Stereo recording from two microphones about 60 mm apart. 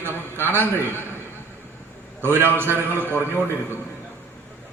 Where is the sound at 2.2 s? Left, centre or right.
Right.